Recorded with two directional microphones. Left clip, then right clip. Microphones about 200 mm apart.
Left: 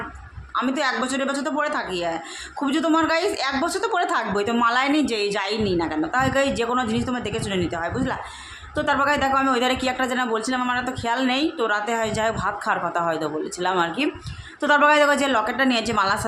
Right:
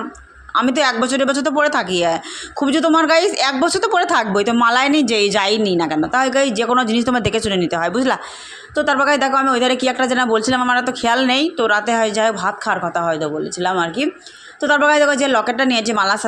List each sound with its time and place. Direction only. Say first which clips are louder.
0.5 s a woman's voice: right 7 dB; 30° right (ahead or behind)
8.7 s a woman's voice: right 5 dB; 25° right (ahead or behind)